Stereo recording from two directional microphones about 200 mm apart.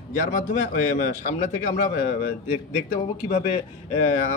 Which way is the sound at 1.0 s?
40° left (ahead or behind).